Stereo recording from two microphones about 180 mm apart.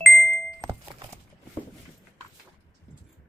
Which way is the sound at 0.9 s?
15° right (ahead or behind).